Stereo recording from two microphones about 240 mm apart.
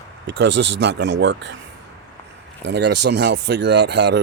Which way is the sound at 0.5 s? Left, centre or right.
Right.